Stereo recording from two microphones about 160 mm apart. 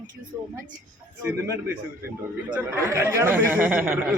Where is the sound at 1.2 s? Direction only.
15° right (ahead or behind).